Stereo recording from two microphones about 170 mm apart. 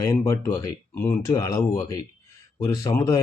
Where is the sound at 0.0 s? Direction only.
20° left (ahead or behind).